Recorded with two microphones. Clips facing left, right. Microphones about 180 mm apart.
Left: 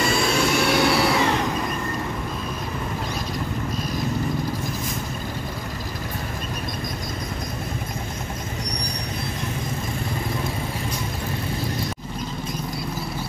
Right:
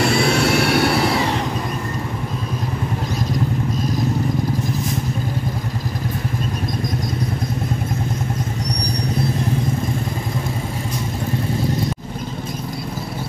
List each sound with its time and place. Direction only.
0.0 s vehicle: 70° right (ahead or behind)